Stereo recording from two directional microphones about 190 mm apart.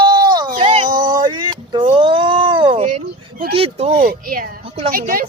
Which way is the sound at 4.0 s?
50° right (ahead or behind).